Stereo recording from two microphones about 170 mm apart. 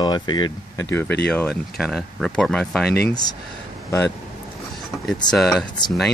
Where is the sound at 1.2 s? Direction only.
5° left (ahead or behind).